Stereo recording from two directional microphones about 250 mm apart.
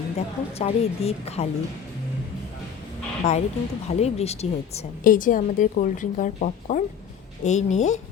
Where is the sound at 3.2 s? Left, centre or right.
Left.